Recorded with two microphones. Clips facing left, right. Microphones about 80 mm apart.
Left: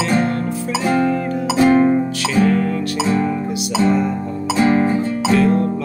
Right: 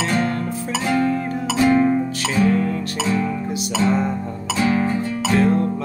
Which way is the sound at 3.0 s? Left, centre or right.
Left.